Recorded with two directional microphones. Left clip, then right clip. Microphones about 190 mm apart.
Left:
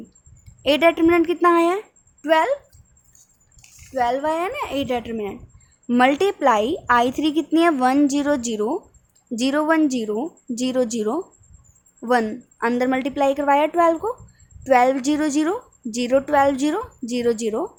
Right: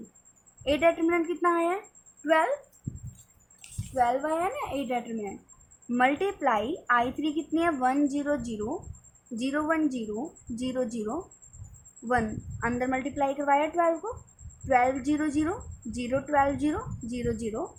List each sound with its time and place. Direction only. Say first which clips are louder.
0.6 s a woman's voice: left 8 dB; 60° left (ahead or behind)
3.9 s a woman's voice: left 5 dB; 55° left (ahead or behind)